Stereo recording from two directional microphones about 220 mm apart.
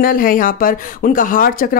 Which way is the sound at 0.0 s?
40° left (ahead or behind).